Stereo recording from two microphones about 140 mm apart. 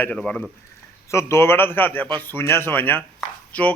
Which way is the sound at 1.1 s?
20° left (ahead or behind).